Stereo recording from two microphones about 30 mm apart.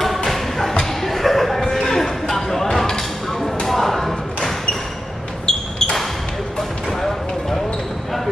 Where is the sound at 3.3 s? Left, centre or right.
Centre.